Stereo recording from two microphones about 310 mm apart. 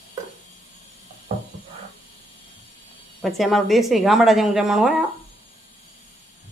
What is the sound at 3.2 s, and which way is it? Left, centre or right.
A woman's voice, centre.